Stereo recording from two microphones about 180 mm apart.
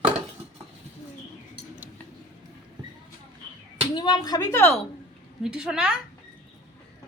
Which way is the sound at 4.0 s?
20° left (ahead or behind).